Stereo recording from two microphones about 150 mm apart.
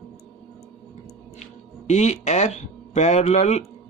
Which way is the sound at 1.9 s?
50° left (ahead or behind).